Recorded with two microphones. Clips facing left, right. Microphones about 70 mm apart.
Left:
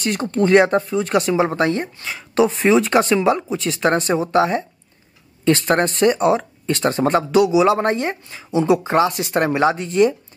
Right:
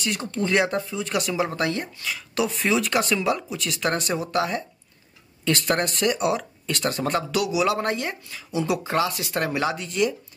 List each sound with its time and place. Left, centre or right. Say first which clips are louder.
0.0 s speech: left 8 dB; left